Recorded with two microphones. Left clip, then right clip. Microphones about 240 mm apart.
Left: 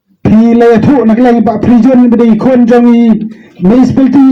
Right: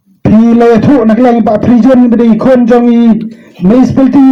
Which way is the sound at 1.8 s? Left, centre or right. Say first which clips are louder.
Left 1 dB; left.